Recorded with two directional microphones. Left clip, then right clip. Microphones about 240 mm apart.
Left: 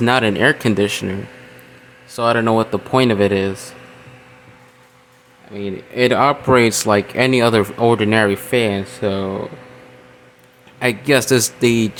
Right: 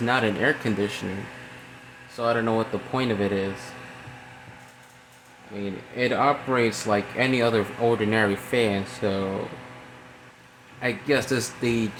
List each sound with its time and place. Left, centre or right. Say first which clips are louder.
0.0 s speech: left 8 dB; left
2.1 s speech: left 8 dB; left
5.5 s speech: left 9 dB; left
10.8 s speech: left 8 dB; left